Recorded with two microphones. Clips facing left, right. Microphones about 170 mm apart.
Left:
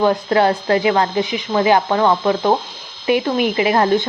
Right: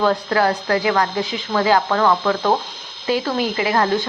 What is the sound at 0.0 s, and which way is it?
Speech, 20° left (ahead or behind).